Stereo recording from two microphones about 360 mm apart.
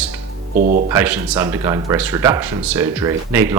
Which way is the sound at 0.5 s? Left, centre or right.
Right.